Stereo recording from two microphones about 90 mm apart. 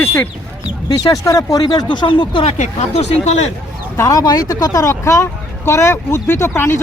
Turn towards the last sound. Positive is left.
turn(degrees=30)  # may be behind; listen again after turning